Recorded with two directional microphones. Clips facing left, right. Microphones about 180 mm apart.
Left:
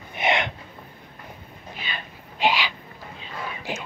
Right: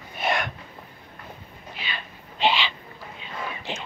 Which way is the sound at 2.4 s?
10° left (ahead or behind).